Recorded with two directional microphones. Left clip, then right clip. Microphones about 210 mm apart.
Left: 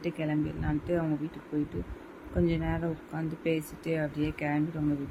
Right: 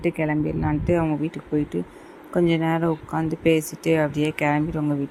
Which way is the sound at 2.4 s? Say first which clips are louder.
Right 10 dB; 15° right (ahead or behind).